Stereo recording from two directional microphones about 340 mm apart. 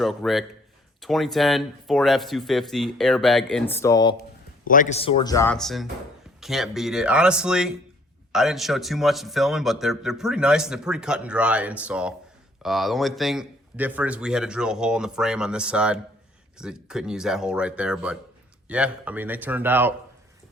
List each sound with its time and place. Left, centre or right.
0.0 s a man's voice: centre
4.7 s a man's voice: left; by 19.9 s centre